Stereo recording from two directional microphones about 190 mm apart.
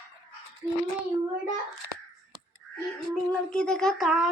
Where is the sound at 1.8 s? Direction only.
70° right (ahead or behind).